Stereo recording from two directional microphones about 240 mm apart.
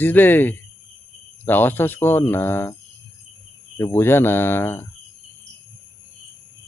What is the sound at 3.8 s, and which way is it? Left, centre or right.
Speech, centre.